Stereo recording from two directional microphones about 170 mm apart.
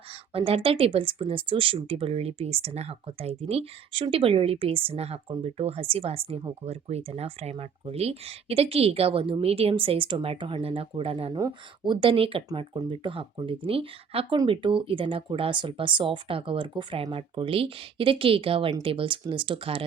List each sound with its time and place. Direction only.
0.3 s speech: 35° right (ahead or behind)